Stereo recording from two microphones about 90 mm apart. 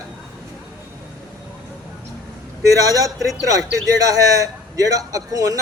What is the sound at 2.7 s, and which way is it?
A man's voice, 40° right (ahead or behind).